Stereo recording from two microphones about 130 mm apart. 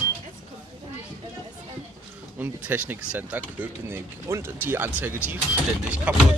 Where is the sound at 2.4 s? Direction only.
15° right (ahead or behind).